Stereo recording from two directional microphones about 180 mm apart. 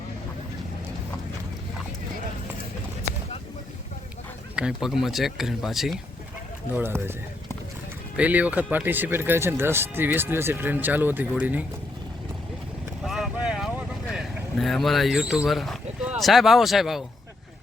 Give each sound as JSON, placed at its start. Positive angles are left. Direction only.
{"t": 4.5, "sound": "speech", "side_deg": -5}
{"t": 8.1, "sound": "speech", "side_deg": -10}
{"t": 13.0, "sound": "vehicle", "side_deg": 0}
{"t": 15.4, "sound": "speech", "side_deg": 0}